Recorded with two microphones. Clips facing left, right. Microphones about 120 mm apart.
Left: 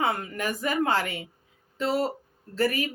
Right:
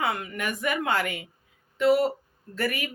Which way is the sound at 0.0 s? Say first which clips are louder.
Left 1 dB; 35° left (ahead or behind).